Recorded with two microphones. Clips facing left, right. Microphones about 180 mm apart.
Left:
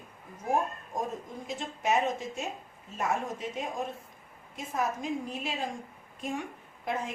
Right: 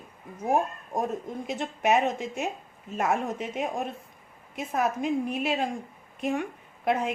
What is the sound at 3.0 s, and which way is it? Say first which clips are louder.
A woman's voice: right 4 dB; 65° right (ahead or behind).